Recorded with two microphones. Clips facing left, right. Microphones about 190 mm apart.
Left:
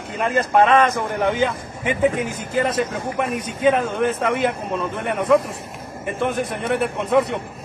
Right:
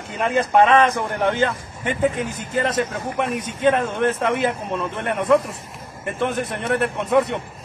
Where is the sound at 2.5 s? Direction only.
Centre (ahead or behind).